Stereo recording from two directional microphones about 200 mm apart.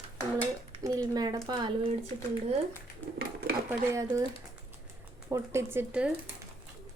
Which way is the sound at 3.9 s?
15° right (ahead or behind).